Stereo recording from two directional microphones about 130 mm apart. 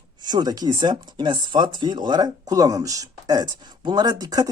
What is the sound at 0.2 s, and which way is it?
Speech, 35° right (ahead or behind).